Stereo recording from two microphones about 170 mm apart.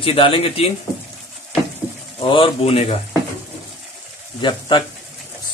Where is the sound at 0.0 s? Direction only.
30° left (ahead or behind).